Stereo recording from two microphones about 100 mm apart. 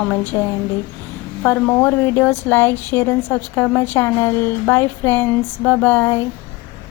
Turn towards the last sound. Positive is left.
turn(degrees=20)  # may be behind; listen again after turning